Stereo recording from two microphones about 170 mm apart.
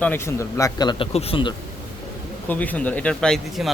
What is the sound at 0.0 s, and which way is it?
A man's voice, 15° left (ahead or behind).